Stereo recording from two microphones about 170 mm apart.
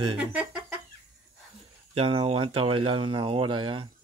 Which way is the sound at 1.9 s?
35° right (ahead or behind).